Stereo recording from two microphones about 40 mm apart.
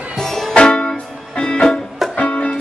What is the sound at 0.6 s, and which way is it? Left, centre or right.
Music, left.